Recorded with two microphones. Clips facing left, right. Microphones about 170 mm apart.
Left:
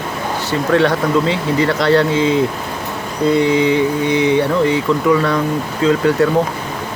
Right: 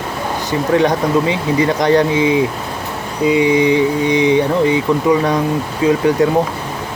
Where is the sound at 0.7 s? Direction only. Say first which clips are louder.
Even; 15° right (ahead or behind).